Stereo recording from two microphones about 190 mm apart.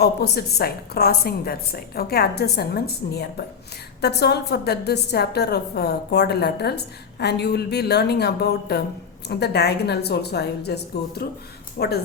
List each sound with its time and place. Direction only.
0.0 s a woman's voice: 55° left (ahead or behind)